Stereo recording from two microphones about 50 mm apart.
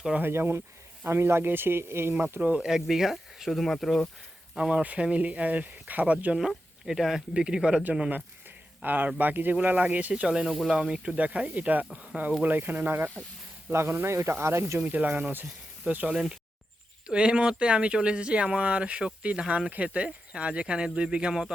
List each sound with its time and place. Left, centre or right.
0.2 s speech: right
2.6 s speech: centre
4.5 s speech: right
6.8 s speech: centre
7.3 s speech: centre
8.1 s speech: right
10.4 s speech: centre
10.7 s speech: centre; by 12.3 s right
12.4 s speech: right
13.7 s speech: right
14.8 s speech: right
17.1 s speech: centre